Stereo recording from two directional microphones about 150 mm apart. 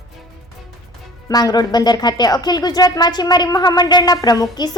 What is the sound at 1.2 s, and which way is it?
Speech, 25° left (ahead or behind).